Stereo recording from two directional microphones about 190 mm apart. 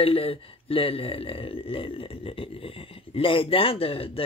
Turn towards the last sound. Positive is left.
turn(degrees=30)  # may be behind; listen again after turning